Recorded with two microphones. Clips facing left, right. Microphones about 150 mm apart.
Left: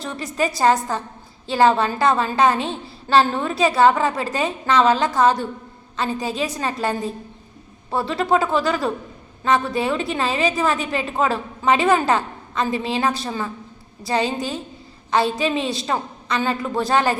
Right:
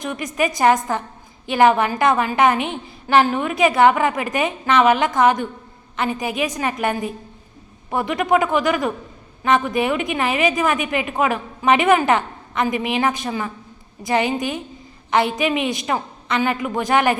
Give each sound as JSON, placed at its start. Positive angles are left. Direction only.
{"t": 0.0, "sound": "a woman's voice", "side_deg": -15}